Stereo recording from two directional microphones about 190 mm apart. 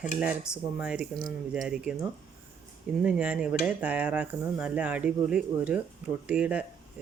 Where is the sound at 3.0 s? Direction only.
5° right (ahead or behind).